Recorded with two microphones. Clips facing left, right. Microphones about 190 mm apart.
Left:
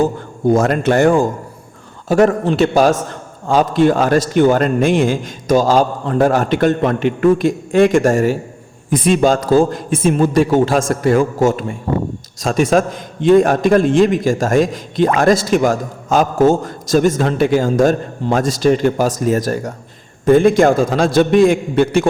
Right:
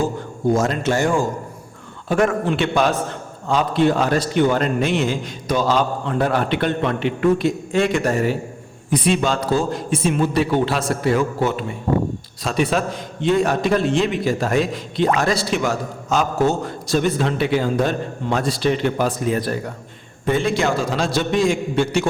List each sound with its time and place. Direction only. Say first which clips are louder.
0.5 s a man's voice: left 6 dB; 60° left (ahead or behind)
2.0 s a man's voice: left 5 dB; 35° left (ahead or behind); by 22.0 s 55° left (ahead or behind)